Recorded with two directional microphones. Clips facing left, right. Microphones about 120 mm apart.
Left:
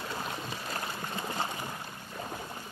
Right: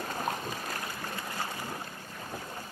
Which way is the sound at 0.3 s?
45° right (ahead or behind).